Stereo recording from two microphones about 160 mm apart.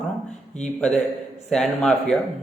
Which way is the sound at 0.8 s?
5° left (ahead or behind).